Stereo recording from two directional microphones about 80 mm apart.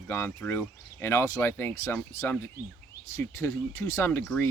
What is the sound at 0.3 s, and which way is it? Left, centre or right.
Speech, left.